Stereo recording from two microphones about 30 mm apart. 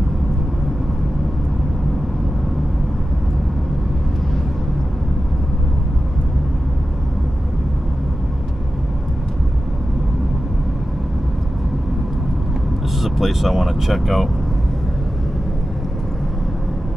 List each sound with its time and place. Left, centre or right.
13.0 s speech: centre